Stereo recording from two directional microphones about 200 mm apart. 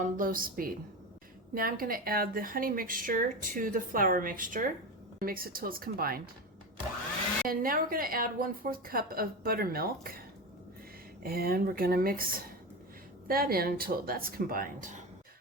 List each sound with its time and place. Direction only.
0.0 s speech: 45° right (ahead or behind)
7.4 s speech: 45° right (ahead or behind)
11.2 s speech: 50° right (ahead or behind)